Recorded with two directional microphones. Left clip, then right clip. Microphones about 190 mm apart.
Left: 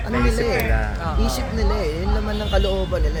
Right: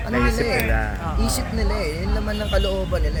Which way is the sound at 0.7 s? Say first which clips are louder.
Right 1 dB; 40° right (ahead or behind).